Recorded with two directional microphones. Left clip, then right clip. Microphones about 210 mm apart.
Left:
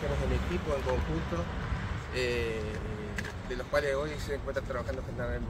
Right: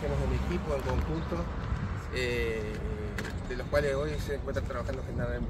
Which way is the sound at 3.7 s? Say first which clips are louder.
Right 1 dB; 10° left (ahead or behind).